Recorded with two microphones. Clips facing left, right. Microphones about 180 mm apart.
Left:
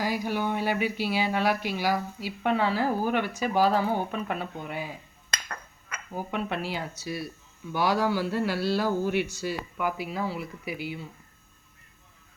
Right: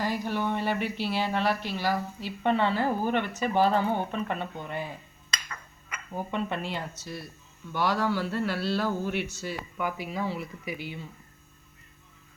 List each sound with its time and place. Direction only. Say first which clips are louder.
0.0 s speech: left 1 dB; 10° left (ahead or behind)
5.3 s hammer: left 2 dB; 55° left (ahead or behind)
6.1 s speech: even; 5° left (ahead or behind)